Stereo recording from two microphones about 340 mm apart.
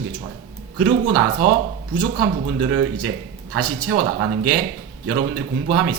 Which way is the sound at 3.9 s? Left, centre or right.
Right.